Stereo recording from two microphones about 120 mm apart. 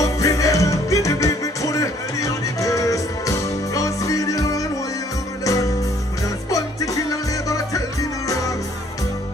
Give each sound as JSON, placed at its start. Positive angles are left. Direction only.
{"t": 0.0, "sound": "music", "side_deg": 25}